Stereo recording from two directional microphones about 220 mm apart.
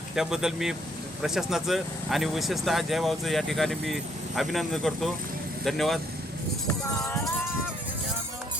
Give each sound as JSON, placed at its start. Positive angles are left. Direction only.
{"t": 0.2, "sound": "speech", "side_deg": 0}
{"t": 7.0, "sound": "music", "side_deg": 10}